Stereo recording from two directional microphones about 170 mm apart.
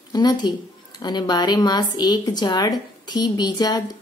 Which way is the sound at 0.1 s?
25° left (ahead or behind).